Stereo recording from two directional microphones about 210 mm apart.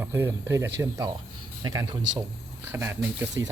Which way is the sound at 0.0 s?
10° right (ahead or behind).